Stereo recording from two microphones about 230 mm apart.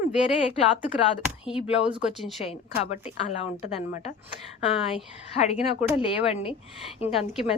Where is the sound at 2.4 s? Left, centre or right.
Left.